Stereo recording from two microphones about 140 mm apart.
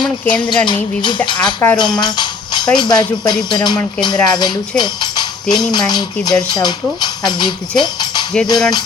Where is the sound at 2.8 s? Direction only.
30° left (ahead or behind).